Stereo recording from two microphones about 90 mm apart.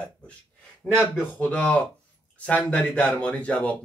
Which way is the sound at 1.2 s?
20° left (ahead or behind).